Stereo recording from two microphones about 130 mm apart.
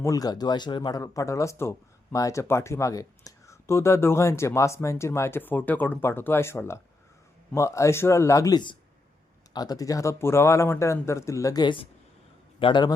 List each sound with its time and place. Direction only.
0.0 s a man's voice: 25° left (ahead or behind)